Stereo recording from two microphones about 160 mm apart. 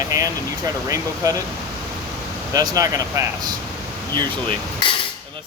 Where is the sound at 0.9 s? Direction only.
20° right (ahead or behind).